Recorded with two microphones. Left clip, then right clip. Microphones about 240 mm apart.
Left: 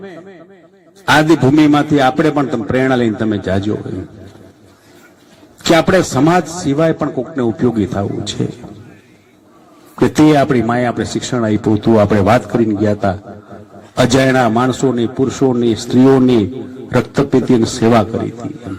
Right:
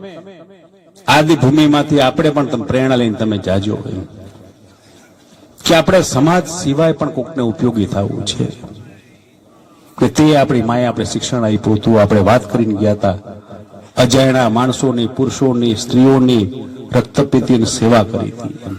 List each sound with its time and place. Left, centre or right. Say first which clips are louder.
0.0 s speech: even; right
5.6 s speech: right 1 dB; right
9.9 s speech: left 1 dB; right